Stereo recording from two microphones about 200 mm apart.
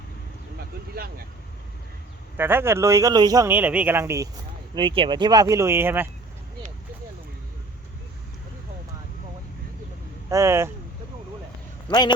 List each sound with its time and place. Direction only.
2.4 s a man's voice: 10° right (ahead or behind)
4.7 s speech: 25° right (ahead or behind)
10.2 s a man's voice: 15° right (ahead or behind)